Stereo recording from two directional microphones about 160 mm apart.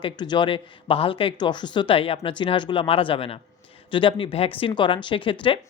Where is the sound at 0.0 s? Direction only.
30° left (ahead or behind).